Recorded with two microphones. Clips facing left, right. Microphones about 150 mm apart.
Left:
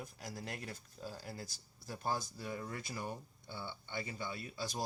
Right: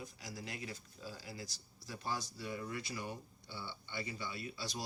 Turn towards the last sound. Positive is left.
turn(degrees=50)  # may be behind; listen again after turning